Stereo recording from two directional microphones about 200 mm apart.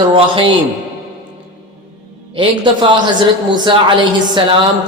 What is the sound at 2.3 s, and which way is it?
Speech, 25° right (ahead or behind).